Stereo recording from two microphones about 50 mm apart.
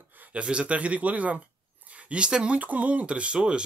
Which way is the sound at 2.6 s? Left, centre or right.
Right.